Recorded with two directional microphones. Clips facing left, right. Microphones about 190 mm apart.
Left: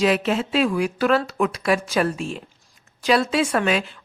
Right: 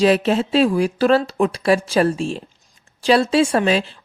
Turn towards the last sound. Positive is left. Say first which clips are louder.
# right 4 dB
turn(degrees=-30)  # may be behind; listen again after turning